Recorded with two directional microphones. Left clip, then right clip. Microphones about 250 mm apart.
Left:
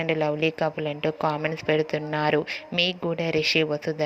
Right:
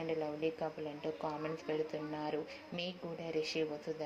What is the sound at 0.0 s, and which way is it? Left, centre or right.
Speech, left.